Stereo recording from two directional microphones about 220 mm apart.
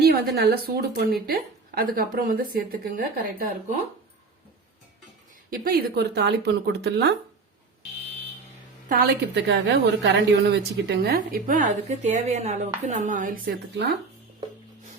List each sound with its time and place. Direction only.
0.0 s speech: 45° right (ahead or behind)
5.5 s speech: 40° right (ahead or behind)
8.9 s a woman's voice: 45° right (ahead or behind)